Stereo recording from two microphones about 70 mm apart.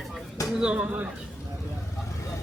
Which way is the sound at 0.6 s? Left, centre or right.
Centre.